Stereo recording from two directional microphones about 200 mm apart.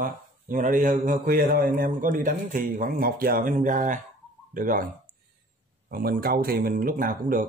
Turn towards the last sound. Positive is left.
turn(degrees=-45)  # may be behind; listen again after turning